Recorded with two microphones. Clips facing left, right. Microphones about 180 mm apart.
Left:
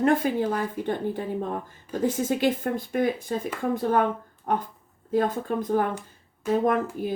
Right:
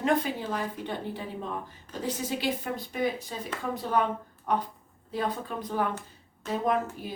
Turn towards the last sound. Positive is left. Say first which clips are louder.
# left 4 dB
turn(degrees=50)  # may be behind; listen again after turning